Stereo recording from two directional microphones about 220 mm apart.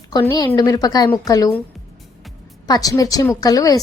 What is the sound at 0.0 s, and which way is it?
A woman's voice, 20° left (ahead or behind).